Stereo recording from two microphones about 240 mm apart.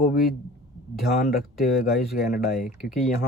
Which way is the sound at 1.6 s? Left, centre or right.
Left.